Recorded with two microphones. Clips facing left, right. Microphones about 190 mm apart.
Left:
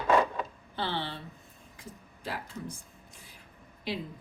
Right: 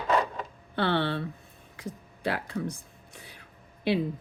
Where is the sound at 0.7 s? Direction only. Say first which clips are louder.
Right 8 dB; 65° right (ahead or behind).